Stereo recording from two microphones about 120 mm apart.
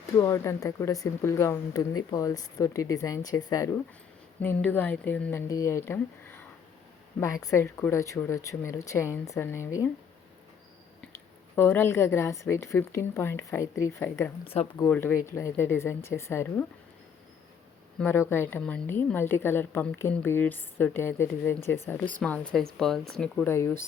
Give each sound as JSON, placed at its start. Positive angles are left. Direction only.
{"t": 0.2, "sound": "speech", "side_deg": 25}
{"t": 4.4, "sound": "a woman's voice", "side_deg": 15}
{"t": 5.5, "sound": "speech", "side_deg": 25}
{"t": 11.5, "sound": "speech", "side_deg": 20}
{"t": 14.4, "sound": "speech", "side_deg": 55}
{"t": 14.8, "sound": "a woman's voice", "side_deg": 15}
{"t": 18.0, "sound": "a woman's voice", "side_deg": 15}
{"t": 23.5, "sound": "speech", "side_deg": 20}